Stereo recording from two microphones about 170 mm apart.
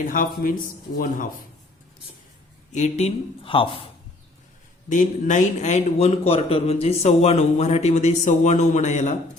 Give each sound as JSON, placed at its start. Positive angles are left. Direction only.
{"t": 0.1, "sound": "speech", "side_deg": 55}
{"t": 2.7, "sound": "a man's voice", "side_deg": 40}
{"t": 4.9, "sound": "a man's voice", "side_deg": 50}